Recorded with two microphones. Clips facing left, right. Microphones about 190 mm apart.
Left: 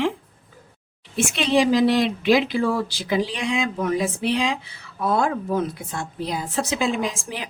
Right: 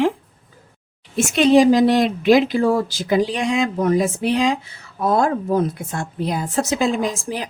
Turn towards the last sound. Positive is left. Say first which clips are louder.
# right 4 dB
turn(degrees=-40)  # may be behind; listen again after turning